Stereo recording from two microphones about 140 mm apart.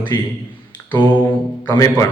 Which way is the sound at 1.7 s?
25° left (ahead or behind).